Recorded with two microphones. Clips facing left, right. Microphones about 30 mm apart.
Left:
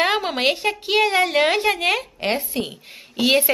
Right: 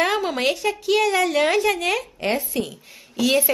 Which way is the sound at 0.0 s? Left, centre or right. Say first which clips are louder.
Left 1 dB; left.